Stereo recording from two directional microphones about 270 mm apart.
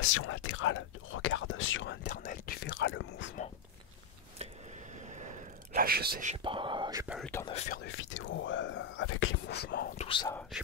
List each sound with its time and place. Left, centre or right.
0.2 s speech: left
2.0 s speech: left
5.0 s a sound: right
5.8 s speech: right
6.3 s whispering: centre
7.2 s speech: centre
7.4 s speech: left
7.8 s speech: left
10.0 s speech: centre